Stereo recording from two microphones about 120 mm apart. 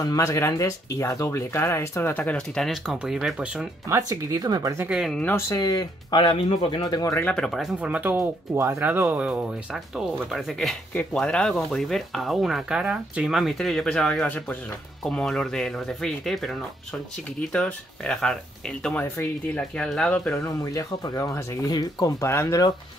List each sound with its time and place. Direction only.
0.0 s speech: 30° left (ahead or behind); by 3.6 s 5° right (ahead or behind)
3.9 s speech: 30° right (ahead or behind)
4.8 s speech: 5° right (ahead or behind)
5.1 s speech: 15° left (ahead or behind)
5.5 s speech: 35° left (ahead or behind)
6.2 s speech: 50° left (ahead or behind)
6.8 s speech: 30° left (ahead or behind)
7.2 s speech: 10° left (ahead or behind); by 9.5 s 10° right (ahead or behind)
9.9 s speech: centre (ahead or behind)
20.4 s speech: 30° left (ahead or behind)